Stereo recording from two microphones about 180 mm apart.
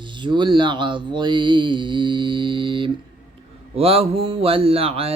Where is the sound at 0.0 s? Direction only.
25° right (ahead or behind).